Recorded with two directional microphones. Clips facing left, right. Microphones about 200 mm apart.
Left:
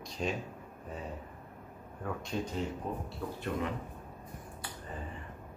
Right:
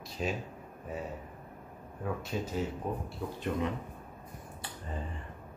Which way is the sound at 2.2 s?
5° right (ahead or behind).